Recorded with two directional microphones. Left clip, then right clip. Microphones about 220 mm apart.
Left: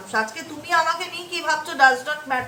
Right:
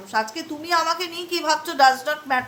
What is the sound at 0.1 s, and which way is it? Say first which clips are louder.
A woman's voice: even; 50° right (ahead or behind).